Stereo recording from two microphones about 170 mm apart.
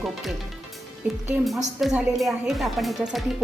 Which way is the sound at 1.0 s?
10° right (ahead or behind).